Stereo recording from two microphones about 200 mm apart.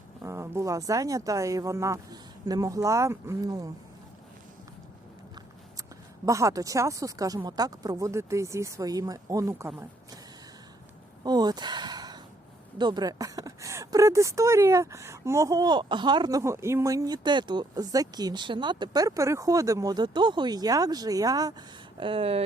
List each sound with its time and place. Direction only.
0.3 s speech: 15° right (ahead or behind)
6.2 s speech: 15° right (ahead or behind)
11.2 s speech: 20° right (ahead or behind)